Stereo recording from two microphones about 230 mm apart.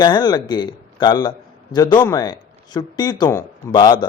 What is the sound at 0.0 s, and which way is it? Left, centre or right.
A man's voice, centre.